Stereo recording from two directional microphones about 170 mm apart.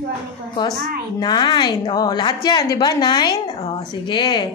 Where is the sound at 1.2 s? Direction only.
25° left (ahead or behind).